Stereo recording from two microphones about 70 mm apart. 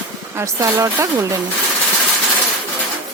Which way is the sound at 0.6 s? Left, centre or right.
Right.